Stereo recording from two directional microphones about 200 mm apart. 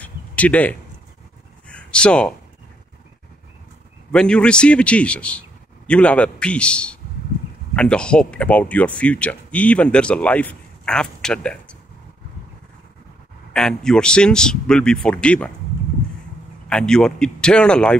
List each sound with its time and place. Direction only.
0.0 s a sound: 5° left (ahead or behind)
1.7 s speech: 5° left (ahead or behind)
4.1 s a man's voice: 5° left (ahead or behind)
13.5 s a man's voice: 5° left (ahead or behind)
16.6 s a man's voice: 5° left (ahead or behind)